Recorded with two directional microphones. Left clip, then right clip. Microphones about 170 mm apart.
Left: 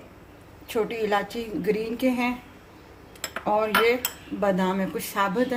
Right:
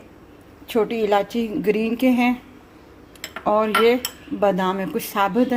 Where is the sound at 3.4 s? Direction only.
40° right (ahead or behind).